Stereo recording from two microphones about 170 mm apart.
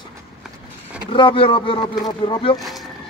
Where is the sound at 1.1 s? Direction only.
30° left (ahead or behind).